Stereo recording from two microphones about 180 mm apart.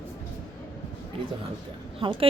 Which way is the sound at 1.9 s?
30° right (ahead or behind).